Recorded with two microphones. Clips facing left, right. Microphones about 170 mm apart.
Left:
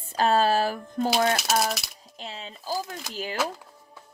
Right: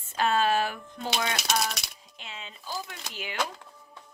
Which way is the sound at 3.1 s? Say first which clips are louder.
Left 7 dB; 35° left (ahead or behind).